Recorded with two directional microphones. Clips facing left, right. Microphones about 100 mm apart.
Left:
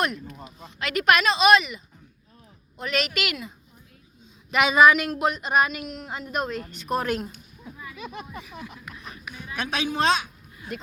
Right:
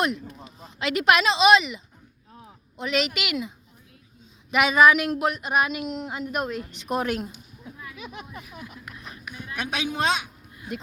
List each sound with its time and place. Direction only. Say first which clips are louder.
0.0 s speech: right 1 dB; 25° right (ahead or behind)
4.5 s speech: even; centre (ahead or behind)
5.8 s speech: right 5 dB; 20° right (ahead or behind)
6.3 s speech: left 2 dB; 10° right (ahead or behind)
7.6 s a sound: left 1 dB; centre (ahead or behind)
9.6 s a man's voice: left 2 dB; 15° right (ahead or behind)